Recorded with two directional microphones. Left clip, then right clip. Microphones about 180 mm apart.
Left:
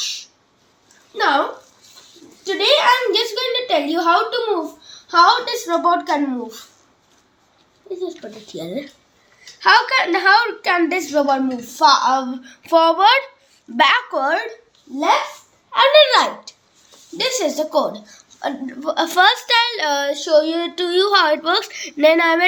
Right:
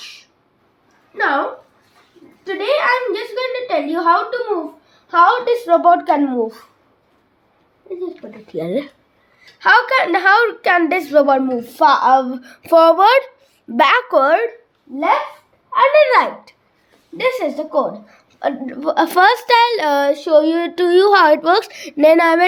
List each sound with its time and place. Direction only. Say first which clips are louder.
1.1 s a sound: even; 5° right (ahead or behind)
2.4 s a sound: left 2 dB; 10° right (ahead or behind)
3.7 s a woman's voice: right 2 dB; 10° right (ahead or behind)
5.0 s a woman's voice: right 1 dB; 40° right (ahead or behind)
5.6 s a woman's voice: right 6 dB; 60° right (ahead or behind)
8.0 s a woman's voice: even; 40° right (ahead or behind); by 14.4 s 60° right (ahead or behind)
15.7 s a woman's voice: right 1 dB; 15° right (ahead or behind)
18.2 s a woman's voice: right 5 dB; 50° right (ahead or behind)